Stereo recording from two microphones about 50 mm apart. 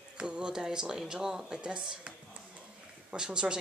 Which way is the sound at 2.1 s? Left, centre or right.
Right.